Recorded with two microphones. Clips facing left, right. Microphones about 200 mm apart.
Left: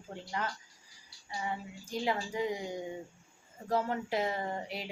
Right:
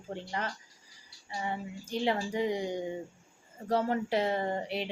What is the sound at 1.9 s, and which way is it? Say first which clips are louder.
Speech: right 3 dB; 30° right (ahead or behind).